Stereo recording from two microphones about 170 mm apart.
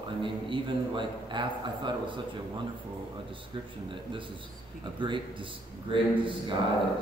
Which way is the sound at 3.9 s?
30° right (ahead or behind).